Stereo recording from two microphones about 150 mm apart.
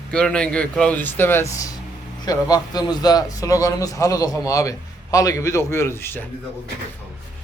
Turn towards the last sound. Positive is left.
turn(degrees=15)  # may be behind; listen again after turning